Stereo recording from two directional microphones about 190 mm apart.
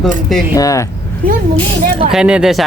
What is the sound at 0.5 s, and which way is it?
Speech, 15° left (ahead or behind).